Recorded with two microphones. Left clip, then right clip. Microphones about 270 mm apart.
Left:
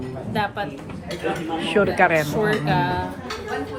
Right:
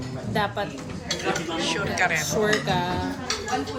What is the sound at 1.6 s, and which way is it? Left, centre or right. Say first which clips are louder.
Speech: left 8 dB; left.